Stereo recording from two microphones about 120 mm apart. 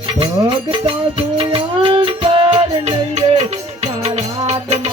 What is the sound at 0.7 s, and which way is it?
Music, 45° right (ahead or behind).